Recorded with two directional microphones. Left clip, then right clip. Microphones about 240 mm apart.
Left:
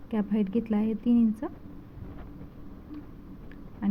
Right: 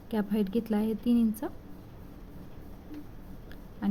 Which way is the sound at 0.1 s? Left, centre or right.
Centre.